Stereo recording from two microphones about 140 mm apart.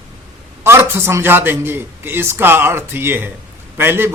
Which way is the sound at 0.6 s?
20° right (ahead or behind).